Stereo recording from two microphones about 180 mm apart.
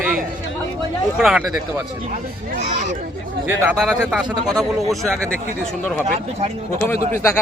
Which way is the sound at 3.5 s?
10° right (ahead or behind).